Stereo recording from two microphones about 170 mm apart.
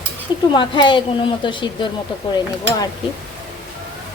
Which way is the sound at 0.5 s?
30° left (ahead or behind).